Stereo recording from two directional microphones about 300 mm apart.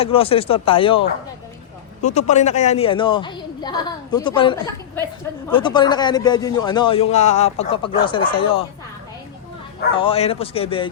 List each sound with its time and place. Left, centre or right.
0.0 s speech: centre
2.1 s a man's voice: left
9.9 s speech: centre